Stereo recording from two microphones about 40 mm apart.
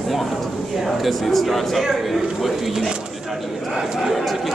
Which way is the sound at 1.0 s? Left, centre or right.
Centre.